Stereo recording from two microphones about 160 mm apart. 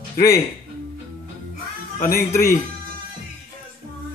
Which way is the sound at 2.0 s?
60° left (ahead or behind).